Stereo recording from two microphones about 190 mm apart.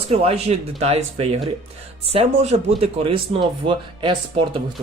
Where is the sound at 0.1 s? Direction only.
35° right (ahead or behind).